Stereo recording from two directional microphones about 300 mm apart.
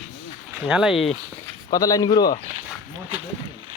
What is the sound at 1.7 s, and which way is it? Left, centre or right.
Speech, centre.